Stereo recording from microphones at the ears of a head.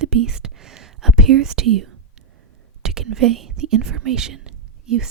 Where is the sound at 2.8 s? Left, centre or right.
Right.